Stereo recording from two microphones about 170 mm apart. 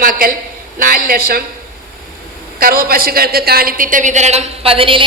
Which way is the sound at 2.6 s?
60° right (ahead or behind).